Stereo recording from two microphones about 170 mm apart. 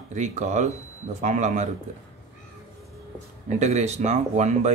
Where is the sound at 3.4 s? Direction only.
40° right (ahead or behind).